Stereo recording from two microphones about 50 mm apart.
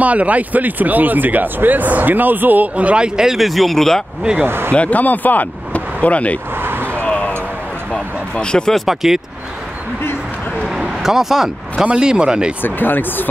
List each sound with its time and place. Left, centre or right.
0.0 s speech: right
2.7 s speech: right
3.2 s speech: centre
4.2 s speech: centre
4.5 s speech: right
4.7 s speech: left
6.6 s vehicle: right
7.0 s a sound: left
8.7 s speech: centre
10.6 s vehicle: centre
11.8 s speech: centre
12.6 s speech: left